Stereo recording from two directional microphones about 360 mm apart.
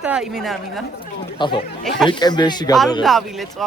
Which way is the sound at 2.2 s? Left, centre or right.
Centre.